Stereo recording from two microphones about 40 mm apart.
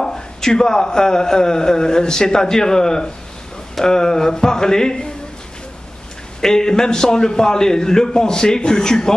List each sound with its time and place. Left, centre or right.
0.0 s a man's voice: centre
6.4 s a man's voice: centre